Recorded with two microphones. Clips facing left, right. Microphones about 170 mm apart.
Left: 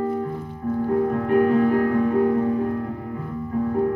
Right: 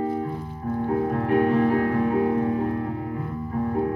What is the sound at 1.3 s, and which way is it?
Music, 40° left (ahead or behind).